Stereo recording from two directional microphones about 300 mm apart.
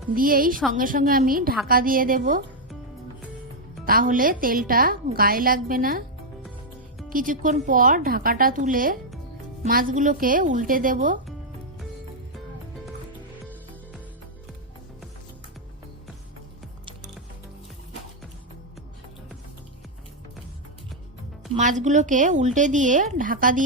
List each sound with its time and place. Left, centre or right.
0.1 s a woman's voice: right
3.8 s a woman's voice: right
7.1 s a woman's voice: right
21.5 s a woman's voice: right